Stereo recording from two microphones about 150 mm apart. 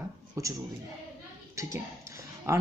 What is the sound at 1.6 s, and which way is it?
Speech, 20° right (ahead or behind).